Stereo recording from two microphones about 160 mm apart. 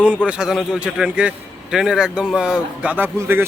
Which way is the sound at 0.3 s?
5° right (ahead or behind).